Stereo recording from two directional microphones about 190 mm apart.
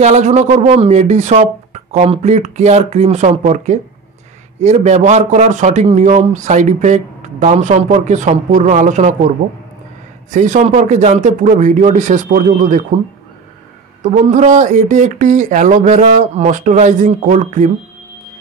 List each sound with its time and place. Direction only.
0.0 s a man's voice: 35° right (ahead or behind)
10.3 s a man's voice: 40° right (ahead or behind)
14.0 s a man's voice: 40° right (ahead or behind)